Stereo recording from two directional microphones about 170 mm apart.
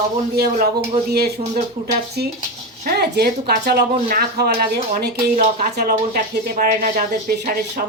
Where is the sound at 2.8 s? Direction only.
70° right (ahead or behind).